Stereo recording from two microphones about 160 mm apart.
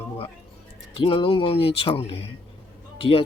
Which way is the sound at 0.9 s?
35° left (ahead or behind).